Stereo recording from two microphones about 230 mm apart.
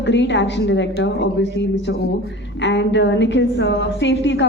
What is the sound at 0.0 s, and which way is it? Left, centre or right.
A woman's voice, left.